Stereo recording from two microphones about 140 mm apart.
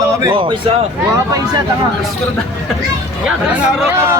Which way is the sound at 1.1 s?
25° right (ahead or behind).